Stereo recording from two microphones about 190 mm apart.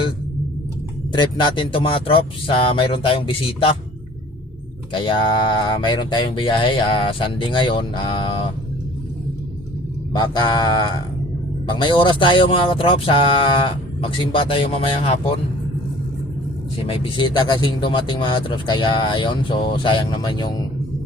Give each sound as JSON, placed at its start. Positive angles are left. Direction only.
{"t": 1.1, "sound": "speech", "side_deg": 25}
{"t": 4.9, "sound": "speech", "side_deg": 25}
{"t": 10.1, "sound": "speech", "side_deg": 20}
{"t": 16.8, "sound": "speech", "side_deg": 25}